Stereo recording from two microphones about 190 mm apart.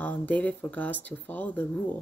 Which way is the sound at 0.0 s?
10° left (ahead or behind).